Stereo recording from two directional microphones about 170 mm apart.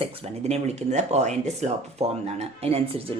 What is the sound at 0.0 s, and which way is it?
Speech, 40° right (ahead or behind).